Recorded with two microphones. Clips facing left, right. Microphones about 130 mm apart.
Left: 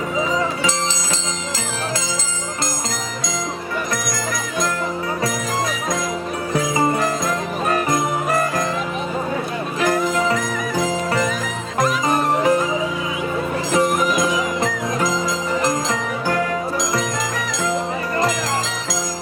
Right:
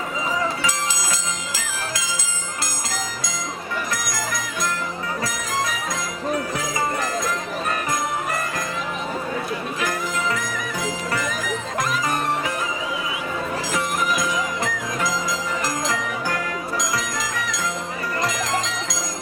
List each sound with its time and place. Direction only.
6.5 s music: 25° left (ahead or behind)
9.8 s jingle bell: 35° left (ahead or behind)
11.8 s music: 35° left (ahead or behind)
13.7 s music: 35° left (ahead or behind)